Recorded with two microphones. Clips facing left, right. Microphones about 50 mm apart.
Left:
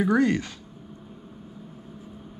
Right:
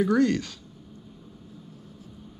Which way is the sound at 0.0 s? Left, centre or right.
Centre.